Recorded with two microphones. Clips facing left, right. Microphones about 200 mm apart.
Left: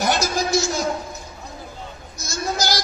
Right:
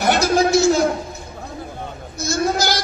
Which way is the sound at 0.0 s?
60° right (ahead or behind).